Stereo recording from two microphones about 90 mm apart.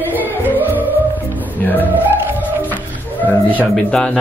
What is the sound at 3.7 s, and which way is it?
Speech, 5° left (ahead or behind).